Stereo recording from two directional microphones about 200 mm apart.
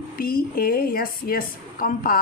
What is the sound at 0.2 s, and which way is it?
A man's voice, 45° left (ahead or behind).